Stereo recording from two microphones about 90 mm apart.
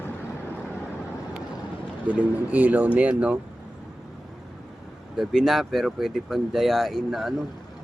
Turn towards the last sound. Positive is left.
turn(degrees=-5)  # may be behind; listen again after turning